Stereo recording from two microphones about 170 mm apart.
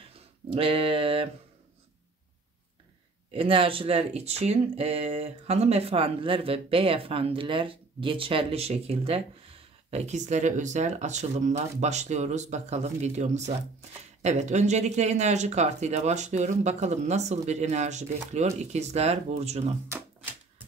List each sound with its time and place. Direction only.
0.5 s speech: 30° right (ahead or behind)
3.3 s speech: 30° right (ahead or behind)